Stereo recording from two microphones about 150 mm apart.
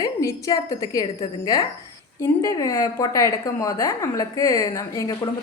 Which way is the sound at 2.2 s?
20° left (ahead or behind).